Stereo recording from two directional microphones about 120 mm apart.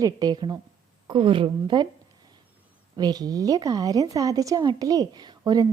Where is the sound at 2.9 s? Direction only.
35° right (ahead or behind).